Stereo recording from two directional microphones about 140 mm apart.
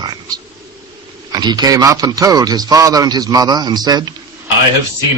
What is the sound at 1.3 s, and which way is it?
A man's voice, 30° right (ahead or behind).